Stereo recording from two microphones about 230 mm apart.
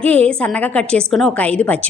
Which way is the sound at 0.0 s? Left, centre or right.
Centre.